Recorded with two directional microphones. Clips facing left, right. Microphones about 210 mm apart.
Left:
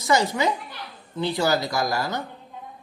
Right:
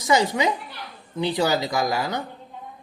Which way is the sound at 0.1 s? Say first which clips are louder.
Right 1 dB; 15° right (ahead or behind).